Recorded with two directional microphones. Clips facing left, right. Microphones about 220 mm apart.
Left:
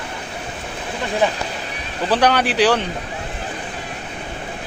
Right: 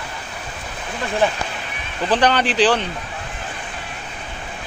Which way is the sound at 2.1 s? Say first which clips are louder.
Left 1 dB; 10° left (ahead or behind).